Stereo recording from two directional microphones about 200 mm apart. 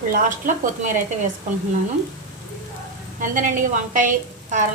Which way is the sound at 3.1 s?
40° right (ahead or behind).